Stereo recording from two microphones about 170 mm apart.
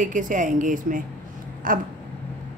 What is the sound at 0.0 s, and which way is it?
A woman's voice, 50° right (ahead or behind).